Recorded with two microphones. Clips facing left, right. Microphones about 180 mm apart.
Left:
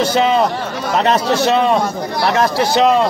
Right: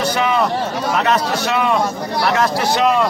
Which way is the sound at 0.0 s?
25° left (ahead or behind).